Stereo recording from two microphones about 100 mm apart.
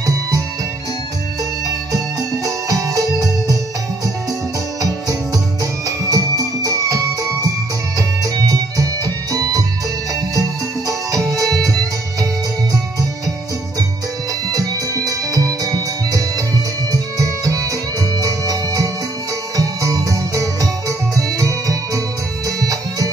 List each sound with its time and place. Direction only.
2.4 s music: 35° right (ahead or behind)
5.9 s music: 35° right (ahead or behind)
10.9 s music: 35° right (ahead or behind)
14.5 s music: 35° right (ahead or behind)